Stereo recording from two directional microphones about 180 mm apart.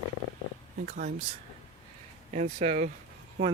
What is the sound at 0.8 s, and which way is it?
Speech, 50° right (ahead or behind).